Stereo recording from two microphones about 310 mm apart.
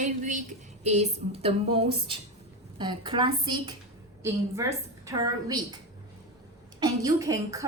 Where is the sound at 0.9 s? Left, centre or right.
Centre.